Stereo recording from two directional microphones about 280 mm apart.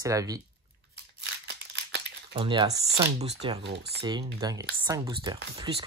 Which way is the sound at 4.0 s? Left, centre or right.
Centre.